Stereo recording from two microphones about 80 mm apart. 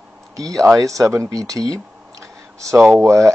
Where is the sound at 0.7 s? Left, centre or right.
Right.